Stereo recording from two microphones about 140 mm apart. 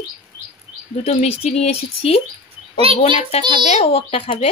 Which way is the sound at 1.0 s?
50° left (ahead or behind).